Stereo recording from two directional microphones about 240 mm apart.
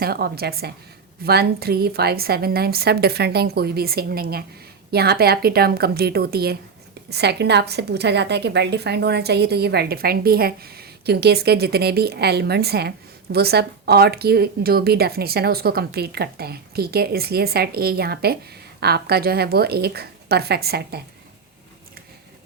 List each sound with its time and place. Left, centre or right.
0.0 s a woman's voice: right